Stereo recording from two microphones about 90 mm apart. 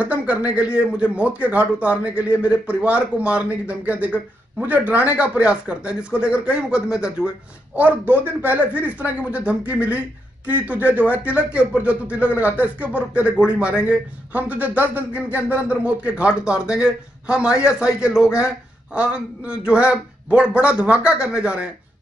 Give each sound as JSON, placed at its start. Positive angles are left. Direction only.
{"t": 0.0, "sound": "speech", "side_deg": -15}